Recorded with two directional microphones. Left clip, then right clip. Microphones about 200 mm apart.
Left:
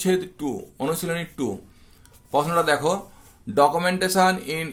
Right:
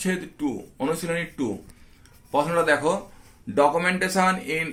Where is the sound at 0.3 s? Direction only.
90° left.